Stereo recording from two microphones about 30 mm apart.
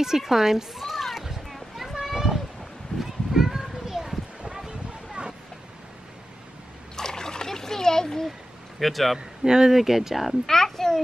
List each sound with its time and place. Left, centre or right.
0.0 s a sound: centre
3.0 s children playing: centre
4.5 s a sound: right
7.0 s splash: centre
8.7 s speech: centre
9.4 s speech: centre
10.4 s a child's voice: centre